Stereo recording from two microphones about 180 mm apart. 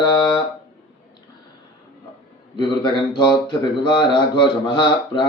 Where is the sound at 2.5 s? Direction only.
25° left (ahead or behind).